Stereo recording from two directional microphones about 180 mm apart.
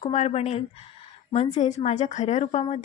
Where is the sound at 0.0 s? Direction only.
40° left (ahead or behind).